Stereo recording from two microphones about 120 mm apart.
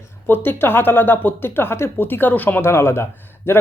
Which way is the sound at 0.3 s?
15° left (ahead or behind).